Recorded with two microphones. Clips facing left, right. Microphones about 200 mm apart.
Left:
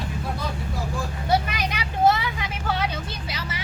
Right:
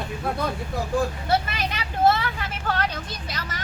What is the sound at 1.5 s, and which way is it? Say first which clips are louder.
Vehicle: left 1 dB; 15° left (ahead or behind).